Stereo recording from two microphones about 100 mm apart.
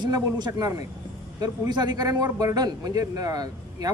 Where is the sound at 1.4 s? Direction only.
45° right (ahead or behind).